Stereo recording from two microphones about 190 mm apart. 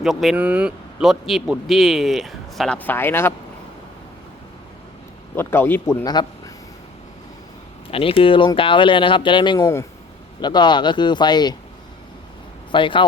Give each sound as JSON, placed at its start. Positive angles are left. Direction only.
{"t": 0.0, "sound": "a man's voice", "side_deg": 0}
{"t": 5.4, "sound": "speech", "side_deg": 10}
{"t": 7.9, "sound": "speech", "side_deg": 30}
{"t": 12.7, "sound": "speech", "side_deg": 25}